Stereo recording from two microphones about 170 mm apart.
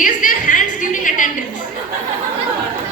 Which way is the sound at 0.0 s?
50° left (ahead or behind).